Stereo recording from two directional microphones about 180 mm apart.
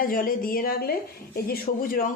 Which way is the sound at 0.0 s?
50° left (ahead or behind).